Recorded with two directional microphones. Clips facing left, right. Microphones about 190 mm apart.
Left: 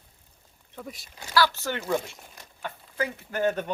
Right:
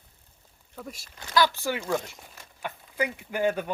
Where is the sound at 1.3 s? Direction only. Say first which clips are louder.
Even; 15° right (ahead or behind).